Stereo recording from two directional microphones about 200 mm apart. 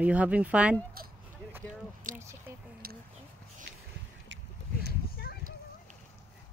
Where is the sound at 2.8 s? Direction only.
50° right (ahead or behind).